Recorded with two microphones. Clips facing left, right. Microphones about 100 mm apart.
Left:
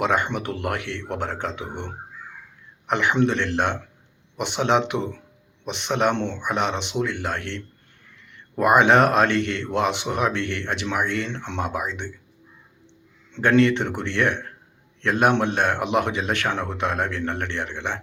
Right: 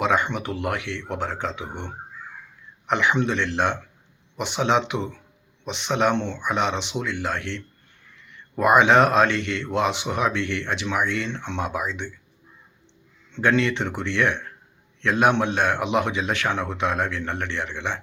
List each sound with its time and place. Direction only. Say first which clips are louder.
0.0 s speech: even; 55° left (ahead or behind)
13.4 s speech: left 3 dB; 50° left (ahead or behind)